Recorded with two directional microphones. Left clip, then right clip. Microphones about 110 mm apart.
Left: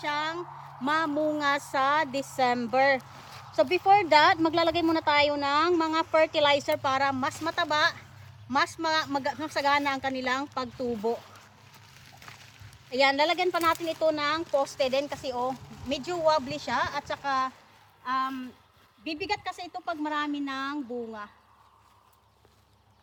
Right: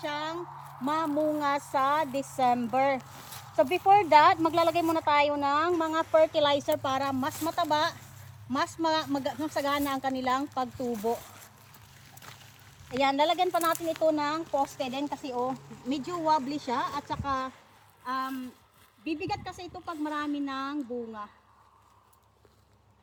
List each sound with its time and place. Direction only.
0.0 s a sound: 30° left (ahead or behind)
0.9 s speech: 40° left (ahead or behind); by 5.8 s 65° left (ahead or behind)
6.0 s speech: 45° left (ahead or behind)
6.4 s speech: 30° left (ahead or behind)
13.0 s speech: 35° left (ahead or behind); by 15.4 s 55° left (ahead or behind)
15.9 s speech: 40° left (ahead or behind)